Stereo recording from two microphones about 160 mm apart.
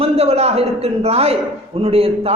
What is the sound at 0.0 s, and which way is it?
A man's voice, 40° right (ahead or behind).